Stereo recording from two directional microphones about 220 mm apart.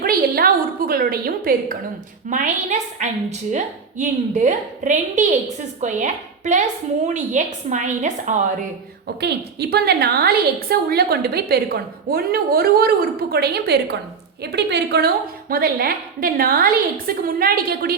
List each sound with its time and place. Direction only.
0.0 s a sound: 40° right (ahead or behind)
2.3 s a woman's voice: 35° right (ahead or behind)
9.2 s a woman's voice: 45° right (ahead or behind)